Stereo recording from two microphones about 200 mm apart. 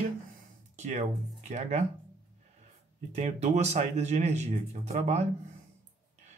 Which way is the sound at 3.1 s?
35° right (ahead or behind).